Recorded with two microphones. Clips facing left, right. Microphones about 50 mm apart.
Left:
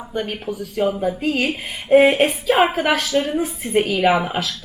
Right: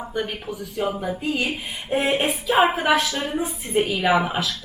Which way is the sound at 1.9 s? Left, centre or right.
Centre.